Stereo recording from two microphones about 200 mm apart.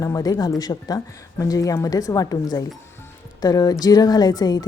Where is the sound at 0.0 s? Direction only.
15° left (ahead or behind).